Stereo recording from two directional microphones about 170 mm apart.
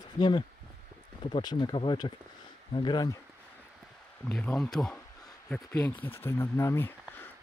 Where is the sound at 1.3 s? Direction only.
25° left (ahead or behind).